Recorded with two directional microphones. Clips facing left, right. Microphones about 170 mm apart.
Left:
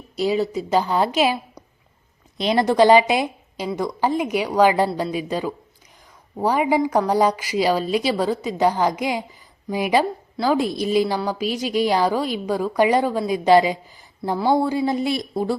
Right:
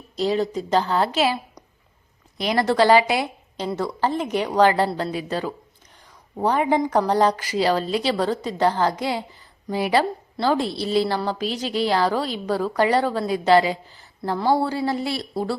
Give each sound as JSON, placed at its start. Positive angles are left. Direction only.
{"t": 0.2, "sound": "a woman's voice", "side_deg": 10}